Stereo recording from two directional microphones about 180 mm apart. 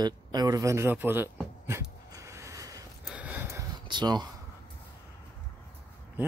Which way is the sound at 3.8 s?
25° right (ahead or behind).